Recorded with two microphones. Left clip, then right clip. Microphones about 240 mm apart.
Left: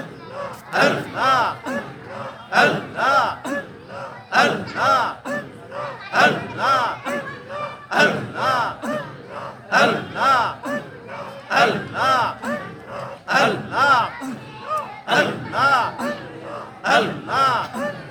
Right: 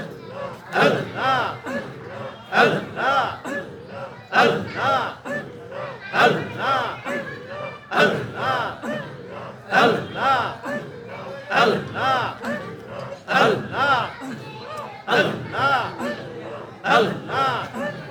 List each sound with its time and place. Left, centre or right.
0.7 s battle cry: left
2.5 s a sound: left
4.3 s battle cry: left
7.9 s a sound: left
11.4 s battle cry: left
12.9 s gasp: left
15.0 s music: left
16.8 s gasp: left